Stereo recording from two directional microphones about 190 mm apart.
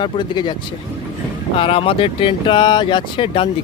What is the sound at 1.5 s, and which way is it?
Speech, 30° left (ahead or behind).